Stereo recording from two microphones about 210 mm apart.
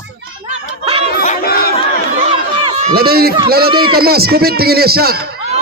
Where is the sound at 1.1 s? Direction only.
45° left (ahead or behind).